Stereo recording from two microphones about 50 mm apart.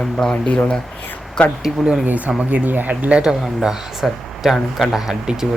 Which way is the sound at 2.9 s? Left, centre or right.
Right.